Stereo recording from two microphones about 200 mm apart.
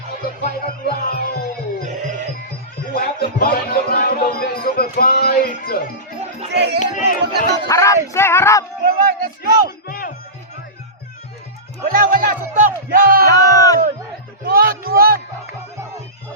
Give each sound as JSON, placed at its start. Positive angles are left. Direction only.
{"t": 0.4, "sound": "music", "side_deg": 50}
{"t": 2.9, "sound": "music", "side_deg": 50}
{"t": 6.5, "sound": "speech", "side_deg": -55}
{"t": 6.7, "sound": "speech", "side_deg": 40}
{"t": 7.7, "sound": "speech", "side_deg": 15}
{"t": 8.8, "sound": "speech", "side_deg": -45}
{"t": 9.8, "sound": "music", "side_deg": 50}
{"t": 11.9, "sound": "speech", "side_deg": -45}
{"t": 13.2, "sound": "speech", "side_deg": 15}
{"t": 14.4, "sound": "a man's voice", "side_deg": -50}